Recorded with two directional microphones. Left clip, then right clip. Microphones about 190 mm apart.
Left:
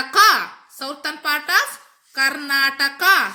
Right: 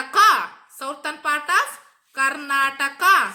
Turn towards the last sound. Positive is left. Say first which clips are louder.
# left 1 dB
turn(degrees=35)  # may be behind; listen again after turning